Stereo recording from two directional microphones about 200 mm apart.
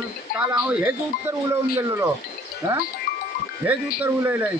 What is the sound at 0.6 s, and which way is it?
Speech, 5° right (ahead or behind).